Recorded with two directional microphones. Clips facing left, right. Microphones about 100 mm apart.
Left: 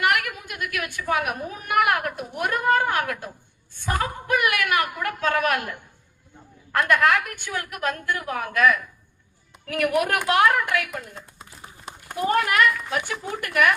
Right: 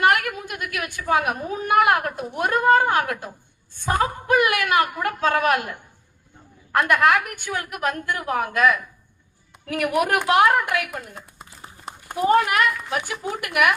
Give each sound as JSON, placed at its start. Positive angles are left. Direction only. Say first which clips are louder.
{"t": 0.0, "sound": "a woman's voice", "louder": "right 4 dB", "side_deg": -30}
{"t": 6.7, "sound": "a woman's voice", "louder": "right 2 dB", "side_deg": -20}